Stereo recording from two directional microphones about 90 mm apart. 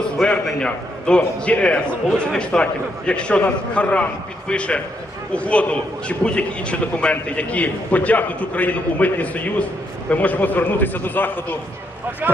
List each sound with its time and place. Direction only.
0.2 s a man's voice: 10° left (ahead or behind)
12.2 s speech: 20° right (ahead or behind)